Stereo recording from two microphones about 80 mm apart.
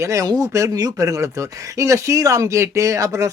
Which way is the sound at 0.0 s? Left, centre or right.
Right.